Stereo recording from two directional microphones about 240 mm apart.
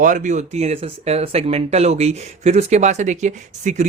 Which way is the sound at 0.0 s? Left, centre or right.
Right.